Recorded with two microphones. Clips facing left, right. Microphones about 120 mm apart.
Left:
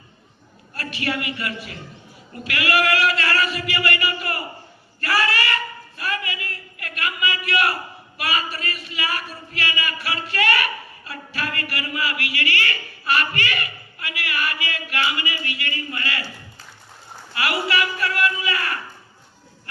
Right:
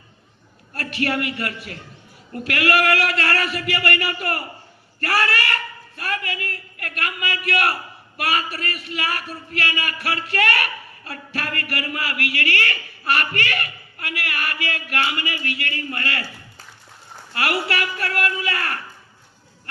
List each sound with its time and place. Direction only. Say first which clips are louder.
0.7 s a man's voice: right 3 dB; 60° right (ahead or behind)
6.0 s a sound: right 1 dB; 55° right (ahead or behind)
8.2 s speech: right 2 dB; 60° right (ahead or behind)
18.0 s speech: left 1 dB; 55° right (ahead or behind)